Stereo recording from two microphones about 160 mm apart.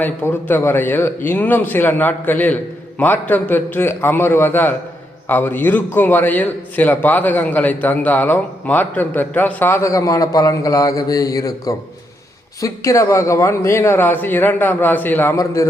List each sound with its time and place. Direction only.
0.0 s a man's voice: 10° left (ahead or behind)